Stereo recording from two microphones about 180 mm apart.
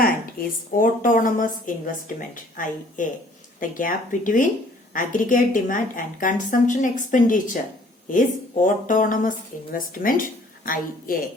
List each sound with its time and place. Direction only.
0.0 s a woman's voice: 50° left (ahead or behind)